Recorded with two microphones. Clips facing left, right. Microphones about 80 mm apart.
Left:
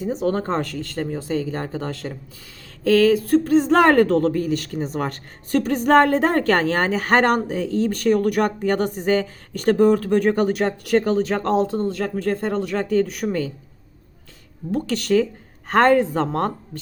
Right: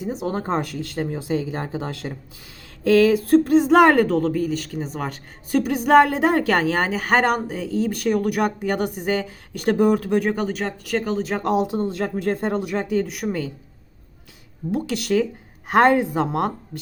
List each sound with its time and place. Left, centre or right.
0.0 s speech: centre
2.9 s a sound: right
3.6 s speech: centre
14.7 s speech: centre